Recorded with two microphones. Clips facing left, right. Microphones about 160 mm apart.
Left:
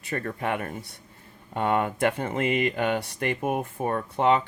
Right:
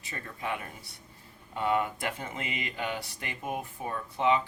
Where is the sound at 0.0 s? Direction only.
60° left (ahead or behind).